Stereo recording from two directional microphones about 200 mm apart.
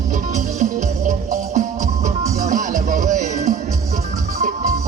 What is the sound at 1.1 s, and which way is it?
Music, 40° right (ahead or behind).